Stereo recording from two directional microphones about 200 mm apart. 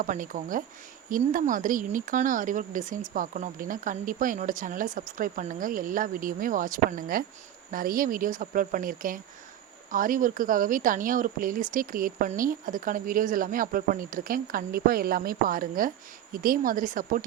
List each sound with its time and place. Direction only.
0.0 s speech: 40° right (ahead or behind)